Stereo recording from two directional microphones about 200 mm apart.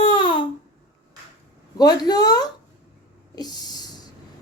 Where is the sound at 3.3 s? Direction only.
20° left (ahead or behind).